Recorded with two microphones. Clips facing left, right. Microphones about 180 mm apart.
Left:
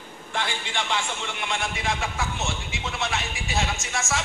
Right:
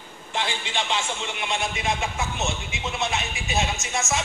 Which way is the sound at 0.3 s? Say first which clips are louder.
Right 1 dB; 20° right (ahead or behind).